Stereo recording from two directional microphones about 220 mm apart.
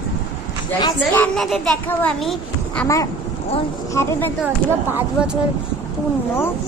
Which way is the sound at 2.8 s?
15° left (ahead or behind).